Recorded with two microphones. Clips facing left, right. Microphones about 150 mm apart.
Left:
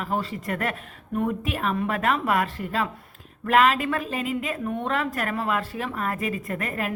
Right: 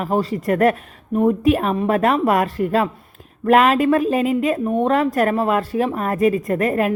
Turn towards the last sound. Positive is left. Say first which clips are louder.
# right 11 dB
turn(degrees=-45)  # may be behind; listen again after turning